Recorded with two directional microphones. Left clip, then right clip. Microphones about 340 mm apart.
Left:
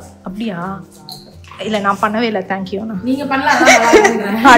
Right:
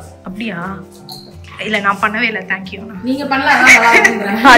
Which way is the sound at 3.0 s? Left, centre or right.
Centre.